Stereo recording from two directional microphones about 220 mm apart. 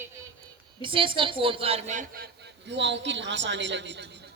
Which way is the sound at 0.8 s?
25° right (ahead or behind).